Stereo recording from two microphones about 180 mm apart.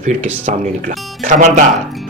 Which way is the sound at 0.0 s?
40° right (ahead or behind).